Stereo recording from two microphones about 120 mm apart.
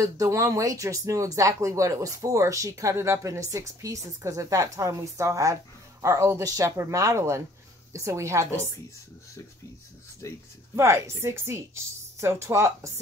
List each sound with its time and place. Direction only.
0.0 s speech: 25° right (ahead or behind)
10.2 s speech: 25° left (ahead or behind)
10.8 s speech: 25° right (ahead or behind)